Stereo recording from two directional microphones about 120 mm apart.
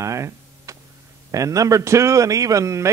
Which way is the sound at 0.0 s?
25° right (ahead or behind).